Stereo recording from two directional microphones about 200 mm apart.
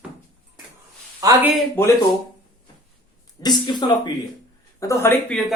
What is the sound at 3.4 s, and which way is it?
Speech, 20° left (ahead or behind).